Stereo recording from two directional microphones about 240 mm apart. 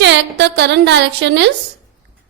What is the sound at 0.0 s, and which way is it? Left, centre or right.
A woman's voice, right.